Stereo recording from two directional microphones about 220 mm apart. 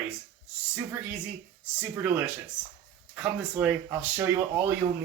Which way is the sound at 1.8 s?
10° right (ahead or behind).